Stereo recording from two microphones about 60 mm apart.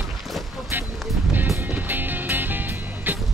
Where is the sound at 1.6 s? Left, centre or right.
Right.